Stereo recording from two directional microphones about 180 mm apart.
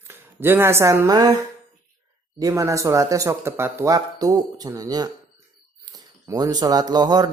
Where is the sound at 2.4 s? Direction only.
15° right (ahead or behind).